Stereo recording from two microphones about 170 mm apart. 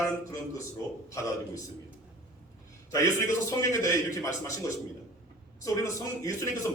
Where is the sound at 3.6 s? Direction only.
20° left (ahead or behind).